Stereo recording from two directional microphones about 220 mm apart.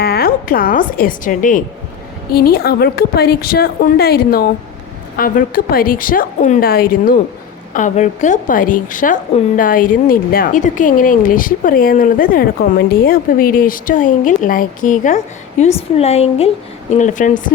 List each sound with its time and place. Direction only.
0.0 s a woman's voice: 45° left (ahead or behind)